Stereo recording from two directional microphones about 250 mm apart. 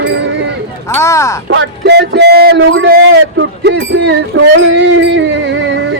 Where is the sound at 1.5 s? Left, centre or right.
Right.